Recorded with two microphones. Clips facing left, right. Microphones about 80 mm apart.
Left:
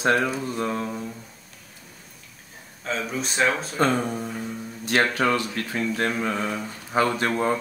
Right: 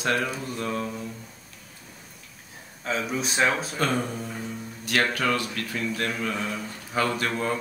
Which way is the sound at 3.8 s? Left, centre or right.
Centre.